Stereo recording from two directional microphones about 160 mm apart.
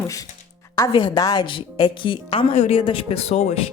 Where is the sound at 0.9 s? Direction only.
30° left (ahead or behind).